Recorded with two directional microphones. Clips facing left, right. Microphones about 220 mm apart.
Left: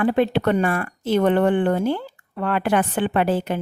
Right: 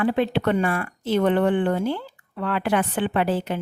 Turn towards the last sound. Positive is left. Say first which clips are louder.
# left 2 dB
turn(degrees=50)  # may be behind; listen again after turning